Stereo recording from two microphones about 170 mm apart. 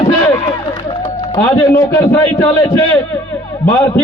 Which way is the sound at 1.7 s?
20° left (ahead or behind).